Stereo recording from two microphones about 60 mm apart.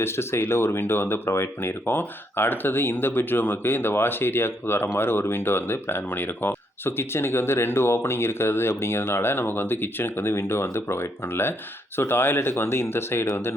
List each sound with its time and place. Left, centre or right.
0.0 s speech: left